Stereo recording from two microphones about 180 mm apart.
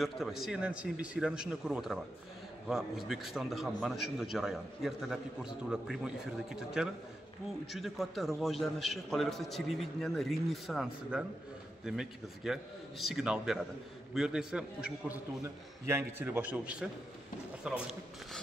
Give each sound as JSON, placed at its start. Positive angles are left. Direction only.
{"t": 0.0, "sound": "a man's voice", "side_deg": 0}